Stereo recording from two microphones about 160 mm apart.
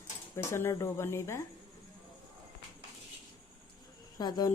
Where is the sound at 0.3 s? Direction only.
15° left (ahead or behind).